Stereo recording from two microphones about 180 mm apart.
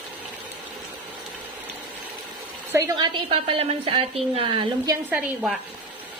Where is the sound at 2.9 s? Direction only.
30° right (ahead or behind).